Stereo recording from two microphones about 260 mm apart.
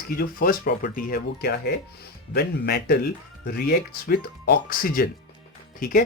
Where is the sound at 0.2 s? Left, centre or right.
Left.